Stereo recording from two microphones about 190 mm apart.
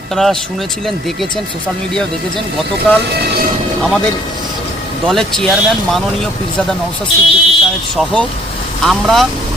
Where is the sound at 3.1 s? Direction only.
60° right (ahead or behind).